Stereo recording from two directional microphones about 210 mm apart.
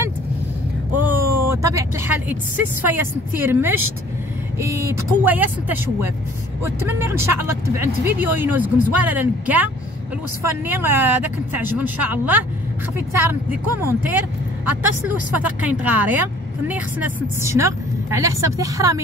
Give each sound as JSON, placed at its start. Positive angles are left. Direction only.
{"t": 1.0, "sound": "speech", "side_deg": -10}
{"t": 10.7, "sound": "speech", "side_deg": -10}
{"t": 15.3, "sound": "speech", "side_deg": -5}